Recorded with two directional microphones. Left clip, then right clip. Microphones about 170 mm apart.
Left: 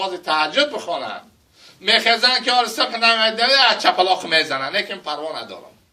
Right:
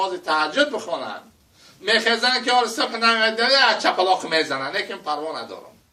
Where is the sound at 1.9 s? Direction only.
25° right (ahead or behind).